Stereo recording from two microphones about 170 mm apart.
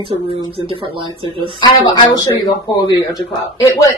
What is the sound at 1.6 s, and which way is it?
Speech, 25° left (ahead or behind).